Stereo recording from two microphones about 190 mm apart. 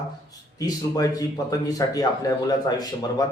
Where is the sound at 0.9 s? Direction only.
20° left (ahead or behind).